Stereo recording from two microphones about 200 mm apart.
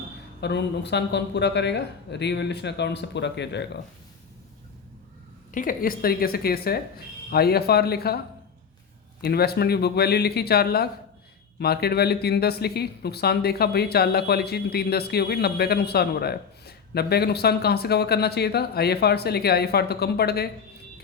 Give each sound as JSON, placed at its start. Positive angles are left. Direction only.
{"t": 0.4, "sound": "speech", "side_deg": 60}
{"t": 5.5, "sound": "speech", "side_deg": 40}
{"t": 9.2, "sound": "speech", "side_deg": 50}